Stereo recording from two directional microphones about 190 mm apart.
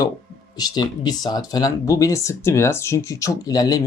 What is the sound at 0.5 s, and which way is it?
Speech, 20° left (ahead or behind).